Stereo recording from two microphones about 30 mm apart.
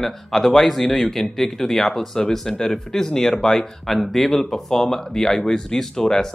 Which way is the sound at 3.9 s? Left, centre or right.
Centre.